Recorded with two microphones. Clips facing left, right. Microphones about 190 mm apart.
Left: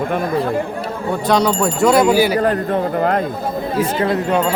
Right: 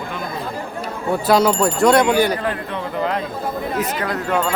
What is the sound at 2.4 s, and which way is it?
Speech, 45° left (ahead or behind).